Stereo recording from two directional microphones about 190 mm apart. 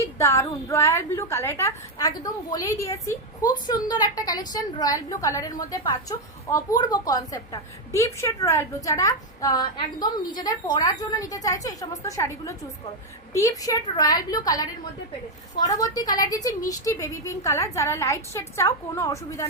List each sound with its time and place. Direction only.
0.0 s a woman's voice: 15° left (ahead or behind)